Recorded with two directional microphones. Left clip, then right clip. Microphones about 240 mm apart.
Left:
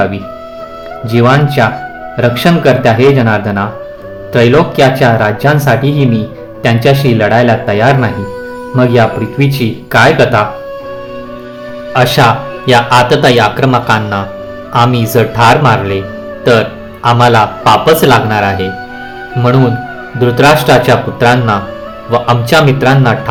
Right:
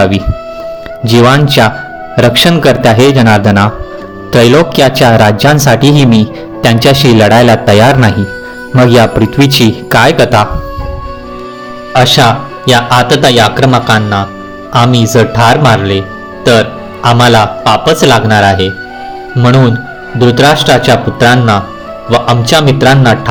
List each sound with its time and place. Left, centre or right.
1.0 s speech: right
11.9 s speech: centre